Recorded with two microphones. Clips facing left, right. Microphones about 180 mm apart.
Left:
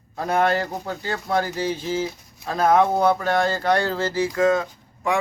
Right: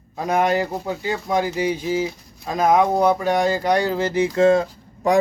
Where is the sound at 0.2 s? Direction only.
10° right (ahead or behind).